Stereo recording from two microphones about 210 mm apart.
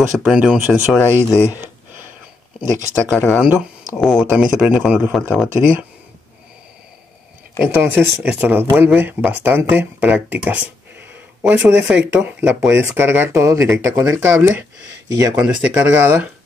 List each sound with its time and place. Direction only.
0.2 s speech: centre (ahead or behind)
1.5 s a sound: 10° right (ahead or behind)
2.6 s speech: 10° left (ahead or behind)
4.0 s speech: 5° right (ahead or behind)
7.5 s speech: 10° right (ahead or behind)